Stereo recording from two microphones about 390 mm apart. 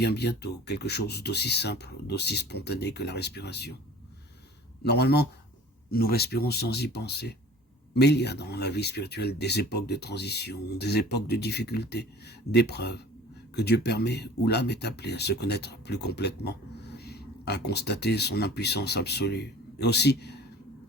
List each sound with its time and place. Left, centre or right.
0.0 s speech: left
4.8 s speech: left